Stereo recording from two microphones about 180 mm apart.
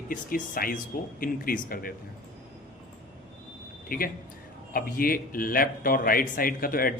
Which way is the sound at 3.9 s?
50° left (ahead or behind).